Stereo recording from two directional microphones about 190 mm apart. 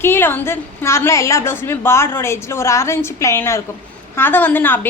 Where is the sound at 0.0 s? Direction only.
10° left (ahead or behind).